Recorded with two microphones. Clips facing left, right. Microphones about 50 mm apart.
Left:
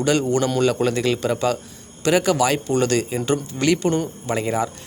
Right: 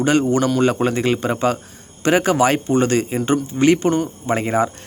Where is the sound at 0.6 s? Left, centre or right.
Right.